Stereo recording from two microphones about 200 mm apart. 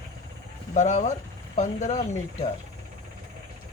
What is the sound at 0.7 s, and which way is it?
Speech, 35° left (ahead or behind).